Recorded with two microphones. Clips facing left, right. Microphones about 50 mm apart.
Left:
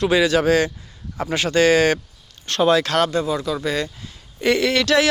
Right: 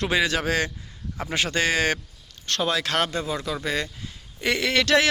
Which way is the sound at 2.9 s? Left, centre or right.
Right.